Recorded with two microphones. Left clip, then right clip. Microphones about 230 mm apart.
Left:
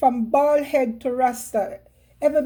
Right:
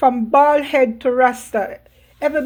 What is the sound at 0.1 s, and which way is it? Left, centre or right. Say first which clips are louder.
A woman's voice: right 5 dB; centre.